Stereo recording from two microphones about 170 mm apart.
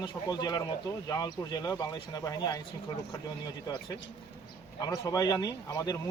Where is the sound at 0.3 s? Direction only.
25° left (ahead or behind).